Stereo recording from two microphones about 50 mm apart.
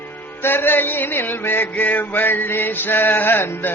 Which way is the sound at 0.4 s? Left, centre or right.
Left.